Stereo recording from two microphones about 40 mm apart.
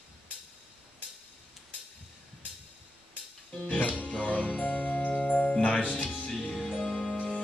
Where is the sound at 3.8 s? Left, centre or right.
Left.